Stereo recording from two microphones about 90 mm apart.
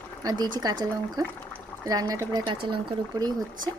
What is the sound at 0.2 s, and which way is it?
Speech, 50° right (ahead or behind).